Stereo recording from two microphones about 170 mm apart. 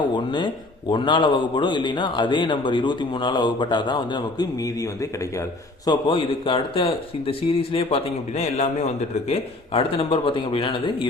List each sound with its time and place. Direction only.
0.3 s speech: 30° left (ahead or behind)